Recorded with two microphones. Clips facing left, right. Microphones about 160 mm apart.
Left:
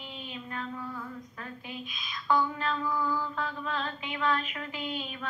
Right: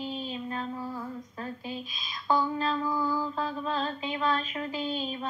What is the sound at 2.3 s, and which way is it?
Female singing, 30° right (ahead or behind).